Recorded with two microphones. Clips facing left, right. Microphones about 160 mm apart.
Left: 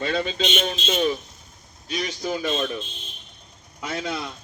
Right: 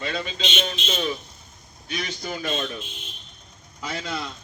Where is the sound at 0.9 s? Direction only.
30° left (ahead or behind).